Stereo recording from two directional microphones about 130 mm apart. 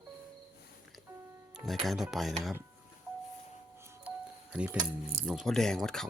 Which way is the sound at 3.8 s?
20° right (ahead or behind).